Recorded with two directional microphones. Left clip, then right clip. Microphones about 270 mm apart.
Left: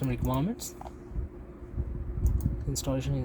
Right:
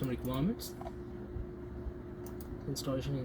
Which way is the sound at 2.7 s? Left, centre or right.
Left.